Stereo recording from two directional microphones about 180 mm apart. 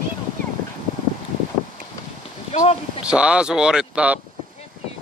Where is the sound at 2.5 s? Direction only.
35° left (ahead or behind).